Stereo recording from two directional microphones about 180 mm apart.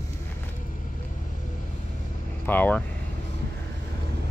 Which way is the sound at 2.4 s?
10° left (ahead or behind).